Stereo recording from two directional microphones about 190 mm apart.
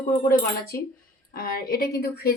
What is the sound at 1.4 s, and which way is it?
Speech, 50° left (ahead or behind).